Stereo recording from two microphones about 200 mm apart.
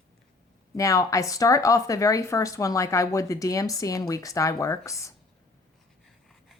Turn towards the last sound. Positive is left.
turn(degrees=15)  # may be behind; listen again after turning